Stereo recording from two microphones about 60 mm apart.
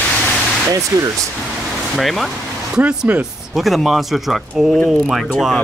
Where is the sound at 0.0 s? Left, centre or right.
Left.